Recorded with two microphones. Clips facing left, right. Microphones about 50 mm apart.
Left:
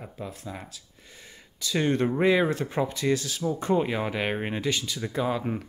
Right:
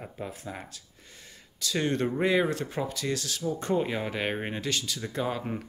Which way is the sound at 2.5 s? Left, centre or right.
Centre.